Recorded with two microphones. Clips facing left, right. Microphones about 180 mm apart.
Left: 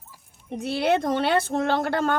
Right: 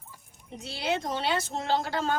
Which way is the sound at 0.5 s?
55° left (ahead or behind).